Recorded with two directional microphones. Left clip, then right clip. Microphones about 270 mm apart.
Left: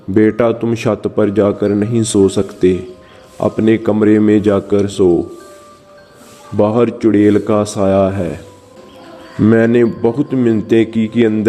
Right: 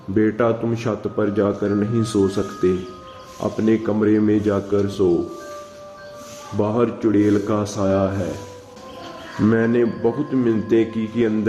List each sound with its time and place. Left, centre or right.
0.1 s speech: left
6.6 s speech: left
9.5 s speech: left